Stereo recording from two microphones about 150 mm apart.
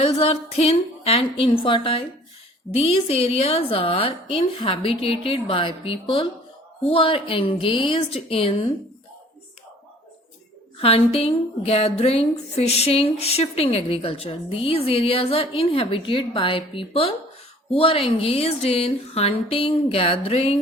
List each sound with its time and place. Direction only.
0.0 s a woman's voice: 40° left (ahead or behind)
10.8 s a woman's voice: 40° left (ahead or behind)